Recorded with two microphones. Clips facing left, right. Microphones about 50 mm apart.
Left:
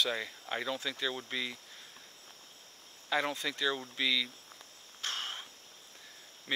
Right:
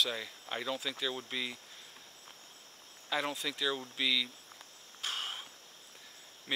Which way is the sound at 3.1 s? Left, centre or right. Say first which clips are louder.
Left 2 dB; centre.